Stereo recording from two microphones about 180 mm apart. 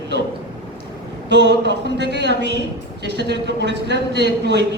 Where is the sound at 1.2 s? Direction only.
75° right (ahead or behind).